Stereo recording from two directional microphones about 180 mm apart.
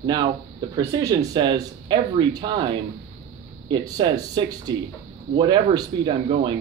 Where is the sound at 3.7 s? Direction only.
25° right (ahead or behind).